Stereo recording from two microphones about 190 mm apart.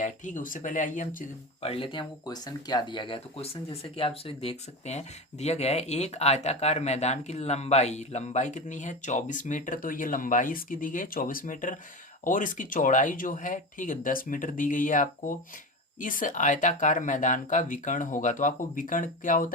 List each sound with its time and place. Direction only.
0.0 s speech: 45° left (ahead or behind)
1.6 s speech: 30° left (ahead or behind); by 19.5 s 45° left (ahead or behind)